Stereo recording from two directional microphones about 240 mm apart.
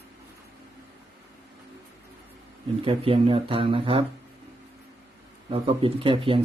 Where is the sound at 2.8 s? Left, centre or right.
Right.